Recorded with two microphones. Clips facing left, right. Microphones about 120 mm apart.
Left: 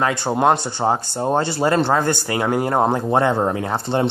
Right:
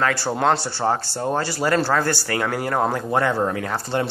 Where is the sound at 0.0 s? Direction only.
20° left (ahead or behind).